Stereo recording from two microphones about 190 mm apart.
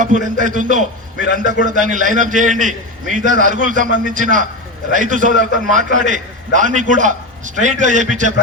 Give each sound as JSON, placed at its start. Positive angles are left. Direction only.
{"t": 0.0, "sound": "a man's voice", "side_deg": -40}